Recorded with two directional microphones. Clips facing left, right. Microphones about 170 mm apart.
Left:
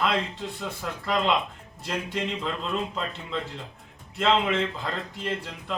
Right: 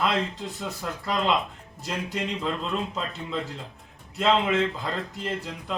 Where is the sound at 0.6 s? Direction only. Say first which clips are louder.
Right 2 dB; centre (ahead or behind).